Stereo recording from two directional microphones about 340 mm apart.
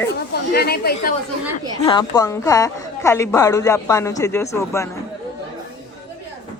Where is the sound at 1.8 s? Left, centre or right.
Centre.